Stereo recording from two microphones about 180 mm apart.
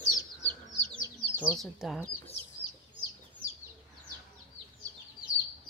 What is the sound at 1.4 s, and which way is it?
Speech, 10° left (ahead or behind).